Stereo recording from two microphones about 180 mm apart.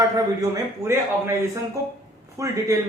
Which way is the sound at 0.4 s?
20° right (ahead or behind).